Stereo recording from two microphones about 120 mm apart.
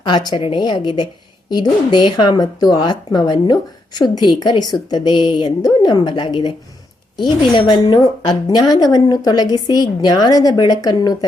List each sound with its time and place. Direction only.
0.0 s speech: 35° left (ahead or behind)